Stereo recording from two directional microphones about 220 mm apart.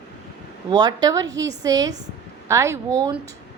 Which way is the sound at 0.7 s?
20° right (ahead or behind).